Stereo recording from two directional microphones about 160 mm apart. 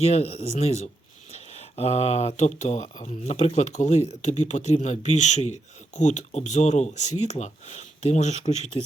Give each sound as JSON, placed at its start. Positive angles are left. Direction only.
{"t": 0.0, "sound": "speech", "side_deg": 40}